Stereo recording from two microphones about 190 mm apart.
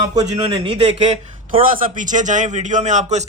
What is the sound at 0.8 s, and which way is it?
Speech, 35° right (ahead or behind).